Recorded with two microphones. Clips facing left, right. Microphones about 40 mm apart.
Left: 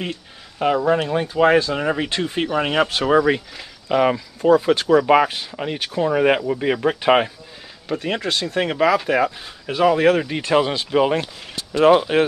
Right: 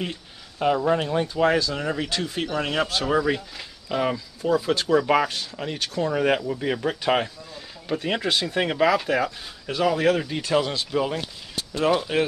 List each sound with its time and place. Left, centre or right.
0.6 s speech: centre
4.9 s speech: centre
7.9 s speech: centre; by 11.2 s left
11.9 s speech: left